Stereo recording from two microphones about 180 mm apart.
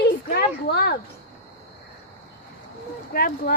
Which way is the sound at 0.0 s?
60° left (ahead or behind).